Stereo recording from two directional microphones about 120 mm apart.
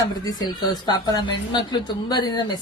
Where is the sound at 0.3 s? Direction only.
35° left (ahead or behind).